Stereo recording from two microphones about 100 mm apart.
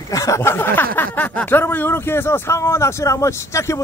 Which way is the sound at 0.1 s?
35° left (ahead or behind).